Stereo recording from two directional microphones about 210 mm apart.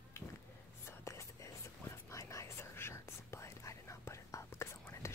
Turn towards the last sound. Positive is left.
turn(degrees=15)  # may be behind; listen again after turning